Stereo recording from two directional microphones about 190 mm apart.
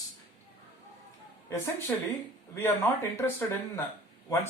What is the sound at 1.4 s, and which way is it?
A woman's voice, 15° left (ahead or behind).